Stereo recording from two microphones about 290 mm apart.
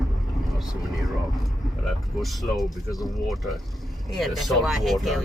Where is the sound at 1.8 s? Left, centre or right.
Centre.